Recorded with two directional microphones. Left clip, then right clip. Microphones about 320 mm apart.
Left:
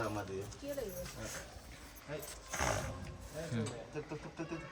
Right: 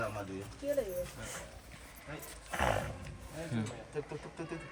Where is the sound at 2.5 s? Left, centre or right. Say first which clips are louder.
Right 4 dB; right.